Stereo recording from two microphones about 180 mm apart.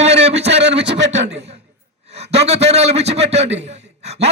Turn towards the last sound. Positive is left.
turn(degrees=-35)  # may be behind; listen again after turning